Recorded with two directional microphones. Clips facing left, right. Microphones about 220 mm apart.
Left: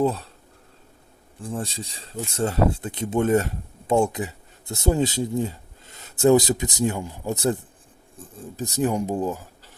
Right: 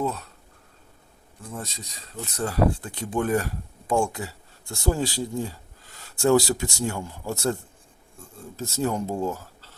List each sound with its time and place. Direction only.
0.0 s speech: 30° left (ahead or behind)
1.4 s speech: 30° left (ahead or behind)